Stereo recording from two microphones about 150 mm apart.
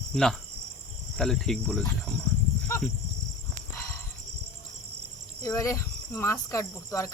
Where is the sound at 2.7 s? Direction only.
15° left (ahead or behind).